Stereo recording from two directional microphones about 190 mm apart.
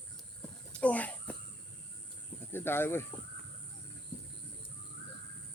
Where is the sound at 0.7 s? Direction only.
5° left (ahead or behind).